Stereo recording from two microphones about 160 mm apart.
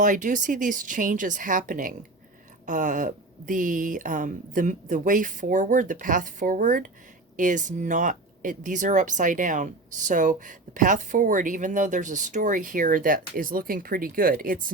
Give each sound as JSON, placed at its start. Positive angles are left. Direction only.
{"t": 0.0, "sound": "speech", "side_deg": -55}